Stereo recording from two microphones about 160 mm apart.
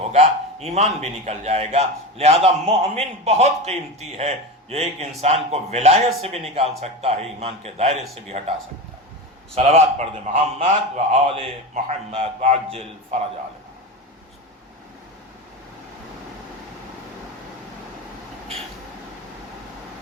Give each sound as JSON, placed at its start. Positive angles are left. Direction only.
{"t": 0.1, "sound": "a man's voice", "side_deg": -40}
{"t": 9.6, "sound": "a man's voice", "side_deg": -40}